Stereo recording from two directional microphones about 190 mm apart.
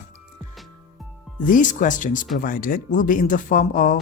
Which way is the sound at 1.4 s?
45° left (ahead or behind).